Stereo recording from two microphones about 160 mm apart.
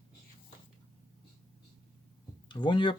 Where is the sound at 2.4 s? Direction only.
30° left (ahead or behind).